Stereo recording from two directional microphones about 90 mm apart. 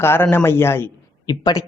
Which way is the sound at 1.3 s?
50° left (ahead or behind).